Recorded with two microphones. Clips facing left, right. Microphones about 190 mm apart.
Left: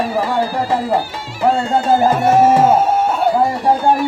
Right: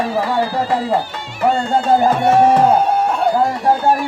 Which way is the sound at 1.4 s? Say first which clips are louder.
Left 1 dB; centre (ahead or behind).